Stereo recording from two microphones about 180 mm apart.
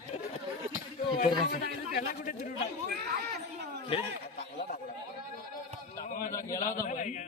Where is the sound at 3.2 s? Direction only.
60° right (ahead or behind).